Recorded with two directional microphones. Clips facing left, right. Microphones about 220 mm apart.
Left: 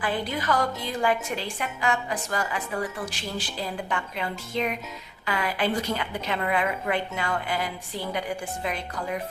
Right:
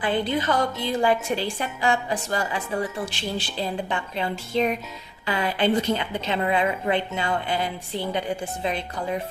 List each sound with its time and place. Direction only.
0.0 s speech: 25° right (ahead or behind)